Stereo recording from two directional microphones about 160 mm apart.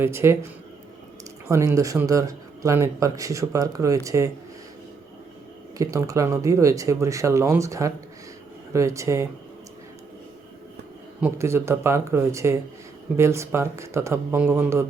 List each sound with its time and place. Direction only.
0.0 s speech: 15° right (ahead or behind)
1.5 s speech: 20° right (ahead or behind)
5.7 s speech: 20° right (ahead or behind)
11.2 s speech: 15° right (ahead or behind)